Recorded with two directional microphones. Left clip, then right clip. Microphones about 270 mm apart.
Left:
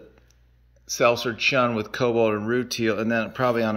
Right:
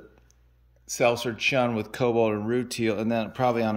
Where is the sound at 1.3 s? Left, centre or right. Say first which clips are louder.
Left 3 dB; centre.